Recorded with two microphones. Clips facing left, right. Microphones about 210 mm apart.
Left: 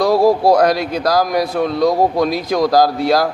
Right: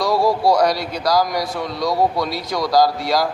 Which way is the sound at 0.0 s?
55° left (ahead or behind).